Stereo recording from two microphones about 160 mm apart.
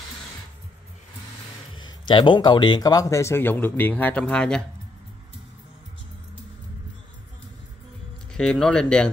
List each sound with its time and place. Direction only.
1.9 s speech: 30° left (ahead or behind); by 4.6 s 5° left (ahead or behind)
8.3 s speech: 5° left (ahead or behind)